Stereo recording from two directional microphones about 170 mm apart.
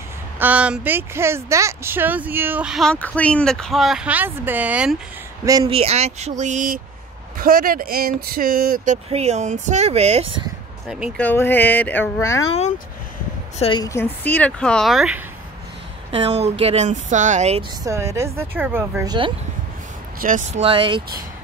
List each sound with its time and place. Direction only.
0.4 s speech: 10° right (ahead or behind)
5.4 s speech: 20° right (ahead or behind)
5.7 s speech: 35° right (ahead or behind)
11.1 s speech: 10° left (ahead or behind)
12.4 s a woman's voice: 40° left (ahead or behind)
13.8 s speech: 15° left (ahead or behind); by 15.2 s 5° right (ahead or behind)
16.1 s speech: 30° right (ahead or behind)
17.8 s speech: 15° right (ahead or behind)
20.2 s speech: 50° right (ahead or behind)
20.6 s speech: 30° right (ahead or behind)